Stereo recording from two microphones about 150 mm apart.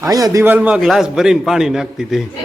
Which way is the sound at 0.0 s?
20° right (ahead or behind).